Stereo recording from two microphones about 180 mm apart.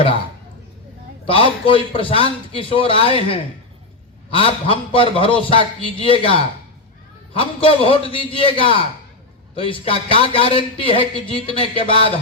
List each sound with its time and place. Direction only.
1.2 s a man's voice: 30° left (ahead or behind)